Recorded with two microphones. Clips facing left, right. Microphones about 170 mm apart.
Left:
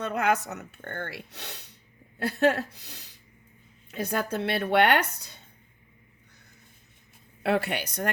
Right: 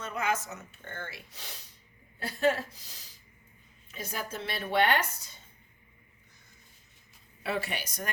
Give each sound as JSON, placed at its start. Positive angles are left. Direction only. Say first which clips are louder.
{"t": 0.0, "sound": "speech", "louder": "left 6 dB", "side_deg": 65}
{"t": 7.4, "sound": "speech", "louder": "left 7 dB", "side_deg": 65}